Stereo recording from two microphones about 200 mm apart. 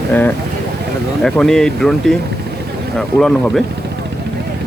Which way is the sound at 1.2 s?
Centre (ahead or behind).